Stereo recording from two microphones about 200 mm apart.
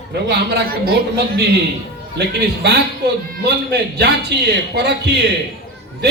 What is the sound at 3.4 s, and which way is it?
A man's voice, 55° right (ahead or behind).